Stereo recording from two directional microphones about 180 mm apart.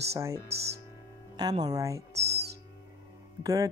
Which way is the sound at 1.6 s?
20° right (ahead or behind).